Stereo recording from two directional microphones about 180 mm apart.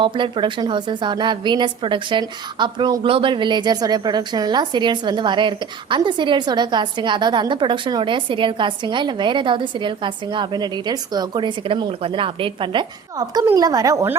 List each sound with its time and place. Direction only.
0.0 s a woman's voice: 25° right (ahead or behind)